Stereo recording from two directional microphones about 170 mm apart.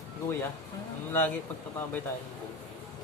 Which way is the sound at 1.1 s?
10° left (ahead or behind).